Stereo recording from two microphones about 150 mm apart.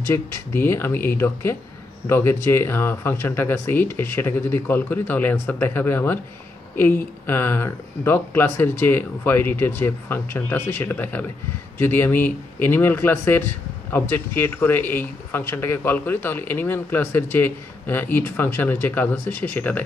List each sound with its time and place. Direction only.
0.0 s speech: 15° left (ahead or behind)